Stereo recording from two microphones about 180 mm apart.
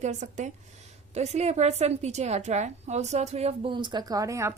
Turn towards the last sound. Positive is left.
turn(degrees=-15)  # may be behind; listen again after turning